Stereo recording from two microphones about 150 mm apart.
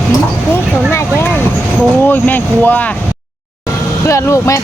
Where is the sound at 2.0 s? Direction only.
10° left (ahead or behind).